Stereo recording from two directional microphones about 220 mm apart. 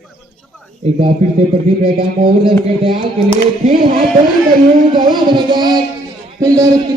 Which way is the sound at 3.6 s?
35° right (ahead or behind).